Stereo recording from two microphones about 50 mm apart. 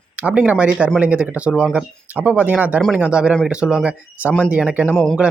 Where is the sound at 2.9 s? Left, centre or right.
Right.